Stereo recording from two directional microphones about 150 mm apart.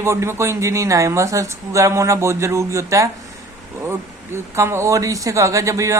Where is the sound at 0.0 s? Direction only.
20° right (ahead or behind).